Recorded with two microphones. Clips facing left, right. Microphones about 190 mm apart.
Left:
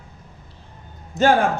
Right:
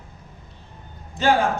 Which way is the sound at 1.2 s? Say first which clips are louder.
Left 4 dB; 45° left (ahead or behind).